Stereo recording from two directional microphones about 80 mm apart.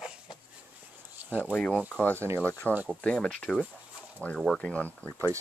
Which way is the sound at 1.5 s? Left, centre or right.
Centre.